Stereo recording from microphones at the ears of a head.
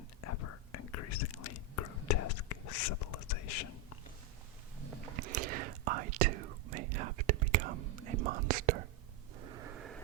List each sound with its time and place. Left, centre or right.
0.2 s whispering: left
4.9 s whispering: right
9.4 s a sound: right